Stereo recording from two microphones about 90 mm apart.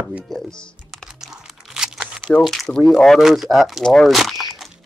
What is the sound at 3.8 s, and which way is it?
Speech, 5° left (ahead or behind).